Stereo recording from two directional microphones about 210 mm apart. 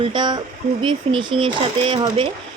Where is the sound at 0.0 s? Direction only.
20° right (ahead or behind).